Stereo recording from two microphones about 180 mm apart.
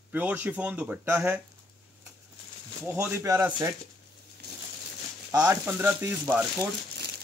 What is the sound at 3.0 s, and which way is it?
Speech, 10° right (ahead or behind).